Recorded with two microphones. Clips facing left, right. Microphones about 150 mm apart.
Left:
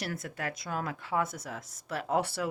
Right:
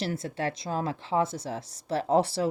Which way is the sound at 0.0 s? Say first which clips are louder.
Right 6 dB; 25° right (ahead or behind).